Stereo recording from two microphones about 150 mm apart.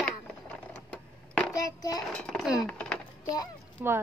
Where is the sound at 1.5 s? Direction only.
25° left (ahead or behind).